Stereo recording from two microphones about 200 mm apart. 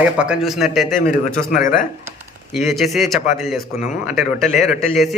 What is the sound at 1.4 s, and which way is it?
Speech, 40° left (ahead or behind).